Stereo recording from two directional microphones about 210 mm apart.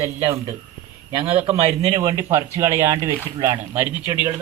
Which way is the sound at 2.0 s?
15° right (ahead or behind).